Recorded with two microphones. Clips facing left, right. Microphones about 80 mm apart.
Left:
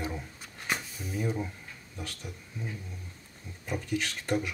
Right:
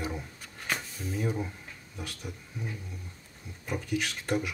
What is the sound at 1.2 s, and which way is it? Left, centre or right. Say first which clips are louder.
Speech: even; centre.